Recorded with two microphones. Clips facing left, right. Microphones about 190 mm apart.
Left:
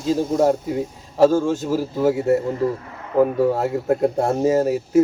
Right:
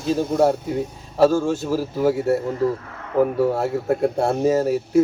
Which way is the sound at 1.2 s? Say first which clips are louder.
Left 1 dB; 15° left (ahead or behind).